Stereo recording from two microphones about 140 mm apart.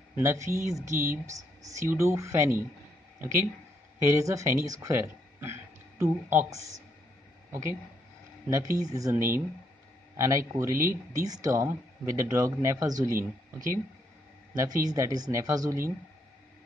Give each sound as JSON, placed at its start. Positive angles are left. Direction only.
{"t": 0.1, "sound": "speech", "side_deg": -20}
{"t": 8.5, "sound": "speech", "side_deg": -25}
{"t": 14.9, "sound": "speech", "side_deg": -25}